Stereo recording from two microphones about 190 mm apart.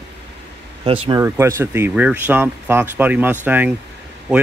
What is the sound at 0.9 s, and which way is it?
Speech, 25° right (ahead or behind).